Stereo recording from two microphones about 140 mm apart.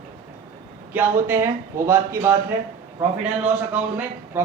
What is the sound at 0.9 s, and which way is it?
Speech, 15° right (ahead or behind).